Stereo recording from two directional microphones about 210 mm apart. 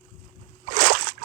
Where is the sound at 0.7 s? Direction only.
50° right (ahead or behind).